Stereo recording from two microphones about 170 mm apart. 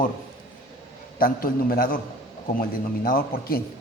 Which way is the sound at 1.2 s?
60° left (ahead or behind).